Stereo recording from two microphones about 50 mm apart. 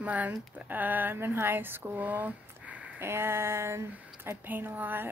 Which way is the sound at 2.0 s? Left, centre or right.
Right.